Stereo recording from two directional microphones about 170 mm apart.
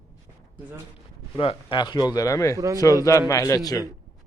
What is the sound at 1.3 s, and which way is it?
Speech, 30° left (ahead or behind).